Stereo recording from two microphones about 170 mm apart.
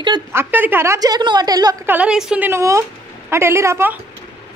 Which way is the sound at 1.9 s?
5° right (ahead or behind).